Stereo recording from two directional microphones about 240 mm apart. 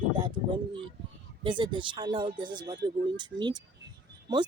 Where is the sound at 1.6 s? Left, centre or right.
Centre.